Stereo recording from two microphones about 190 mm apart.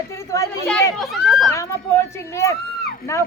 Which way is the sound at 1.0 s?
Centre (ahead or behind).